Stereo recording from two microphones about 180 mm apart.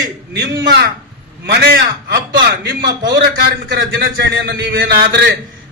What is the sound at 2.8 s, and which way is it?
A man's voice, 50° right (ahead or behind).